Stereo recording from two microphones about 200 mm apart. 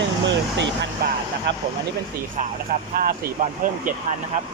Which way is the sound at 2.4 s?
45° right (ahead or behind).